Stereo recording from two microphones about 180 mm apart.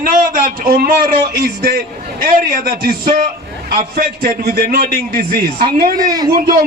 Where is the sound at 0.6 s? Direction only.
55° right (ahead or behind).